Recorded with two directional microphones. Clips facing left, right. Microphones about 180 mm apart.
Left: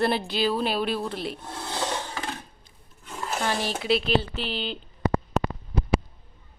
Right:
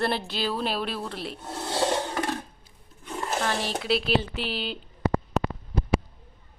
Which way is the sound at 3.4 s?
Centre (ahead or behind).